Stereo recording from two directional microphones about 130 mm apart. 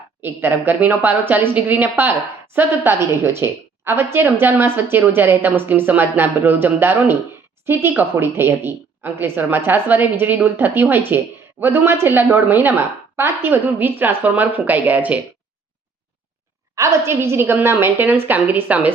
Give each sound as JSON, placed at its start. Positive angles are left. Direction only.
{"t": 0.2, "sound": "a woman's voice", "side_deg": -15}
{"t": 16.7, "sound": "a woman's voice", "side_deg": -20}